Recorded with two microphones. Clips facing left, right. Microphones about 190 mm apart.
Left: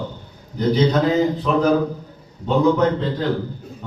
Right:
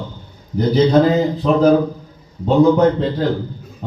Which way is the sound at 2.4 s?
35° right (ahead or behind).